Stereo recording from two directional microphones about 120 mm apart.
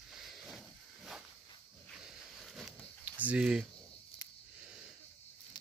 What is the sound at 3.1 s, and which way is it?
Speech, 10° right (ahead or behind).